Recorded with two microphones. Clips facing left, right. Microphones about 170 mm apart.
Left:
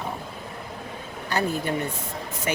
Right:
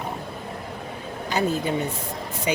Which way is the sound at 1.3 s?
15° right (ahead or behind).